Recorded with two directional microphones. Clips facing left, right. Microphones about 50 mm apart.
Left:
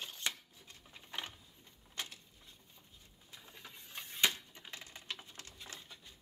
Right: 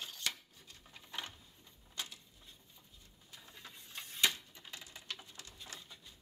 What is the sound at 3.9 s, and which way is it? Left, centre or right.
Typewriter, left.